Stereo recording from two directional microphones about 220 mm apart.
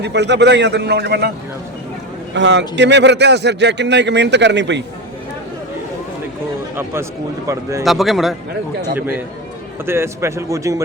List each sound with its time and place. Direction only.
0.0 s a man's voice: 50° right (ahead or behind)
2.3 s a man's voice: 55° right (ahead or behind)
7.4 s a man's voice: 15° right (ahead or behind)
7.9 s a man's voice: centre (ahead or behind)